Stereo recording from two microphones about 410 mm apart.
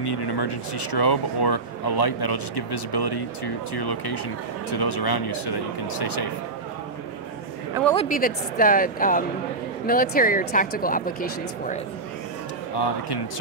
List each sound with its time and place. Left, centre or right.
0.0 s speech: left
7.9 s speech: centre